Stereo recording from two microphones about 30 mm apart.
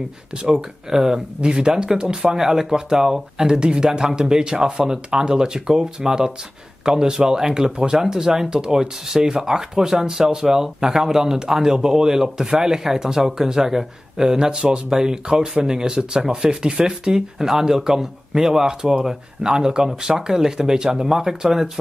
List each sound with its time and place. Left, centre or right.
0.4 s a man's voice: right
8.7 s a man's voice: centre